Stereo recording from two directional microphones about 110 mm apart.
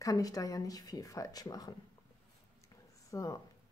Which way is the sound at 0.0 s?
35° left (ahead or behind).